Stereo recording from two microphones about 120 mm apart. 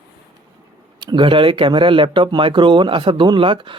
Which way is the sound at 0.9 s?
40° right (ahead or behind).